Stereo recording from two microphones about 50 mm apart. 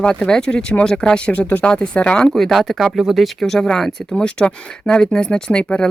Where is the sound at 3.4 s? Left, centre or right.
Centre.